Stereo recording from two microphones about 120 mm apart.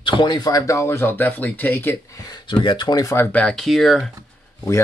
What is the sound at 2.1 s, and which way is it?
Speech, 35° left (ahead or behind).